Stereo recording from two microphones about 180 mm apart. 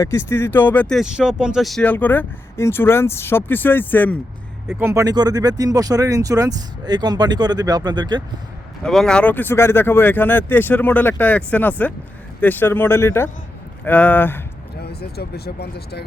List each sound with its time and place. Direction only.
0.0 s speech: 15° left (ahead or behind)
4.7 s speech: 15° right (ahead or behind)
8.8 s speech: 5° left (ahead or behind)
14.8 s speech: 60° left (ahead or behind)